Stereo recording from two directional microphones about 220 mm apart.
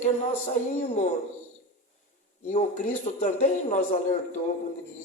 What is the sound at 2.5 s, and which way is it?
Speech, 35° left (ahead or behind).